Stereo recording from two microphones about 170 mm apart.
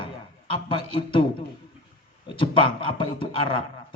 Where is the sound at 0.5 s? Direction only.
30° left (ahead or behind).